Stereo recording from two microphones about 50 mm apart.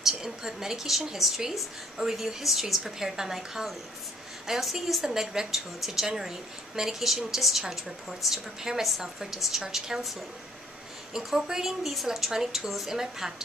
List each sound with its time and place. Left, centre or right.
0.0 s a woman's voice: centre